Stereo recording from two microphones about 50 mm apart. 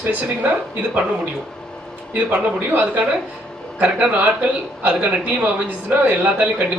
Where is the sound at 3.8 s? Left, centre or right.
Right.